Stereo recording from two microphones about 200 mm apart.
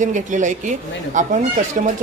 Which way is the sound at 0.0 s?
40° right (ahead or behind).